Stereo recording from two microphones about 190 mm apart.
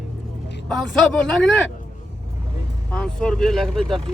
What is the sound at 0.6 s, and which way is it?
Speech, 5° left (ahead or behind).